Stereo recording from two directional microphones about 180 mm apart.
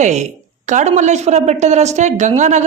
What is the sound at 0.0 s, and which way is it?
A man's voice, 40° right (ahead or behind).